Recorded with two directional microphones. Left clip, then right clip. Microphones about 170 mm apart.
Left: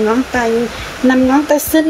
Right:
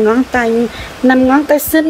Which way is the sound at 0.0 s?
45° right (ahead or behind).